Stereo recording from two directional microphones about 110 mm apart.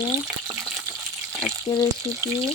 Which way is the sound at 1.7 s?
35° left (ahead or behind).